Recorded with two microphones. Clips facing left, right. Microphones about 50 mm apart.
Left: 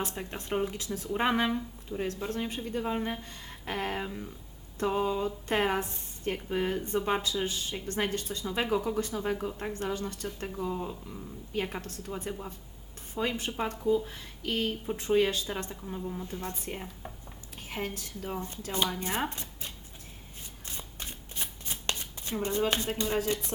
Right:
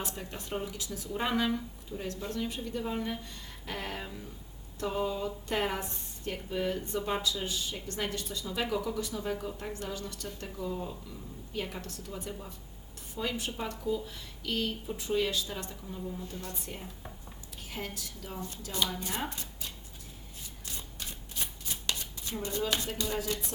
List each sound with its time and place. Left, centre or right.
0.1 s speech: left
1.5 s a woman's voice: centre
2.0 s a woman's voice: left
11.1 s speech: left
13.2 s a woman's voice: left
20.7 s shuffling cards: left